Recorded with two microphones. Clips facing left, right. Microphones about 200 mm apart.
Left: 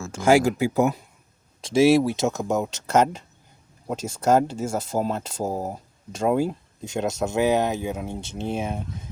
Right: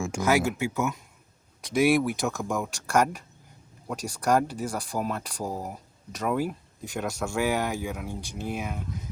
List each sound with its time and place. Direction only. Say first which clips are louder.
0.2 s speech: left 7 dB; 30° left (ahead or behind)